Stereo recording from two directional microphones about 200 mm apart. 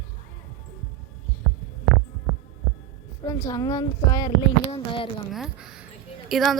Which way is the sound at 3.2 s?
15° left (ahead or behind).